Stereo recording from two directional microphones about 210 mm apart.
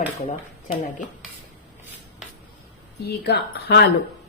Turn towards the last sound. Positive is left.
turn(degrees=55)  # may be behind; listen again after turning